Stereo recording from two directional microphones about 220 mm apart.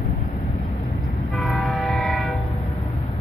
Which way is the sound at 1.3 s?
Centre (ahead or behind).